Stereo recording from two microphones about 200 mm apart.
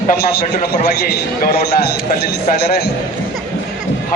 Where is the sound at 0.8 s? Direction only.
50° left (ahead or behind).